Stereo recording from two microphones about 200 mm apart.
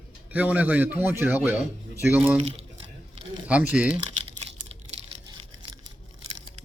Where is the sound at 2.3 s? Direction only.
30° right (ahead or behind).